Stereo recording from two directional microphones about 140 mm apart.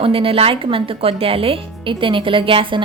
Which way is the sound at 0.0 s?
40° right (ahead or behind).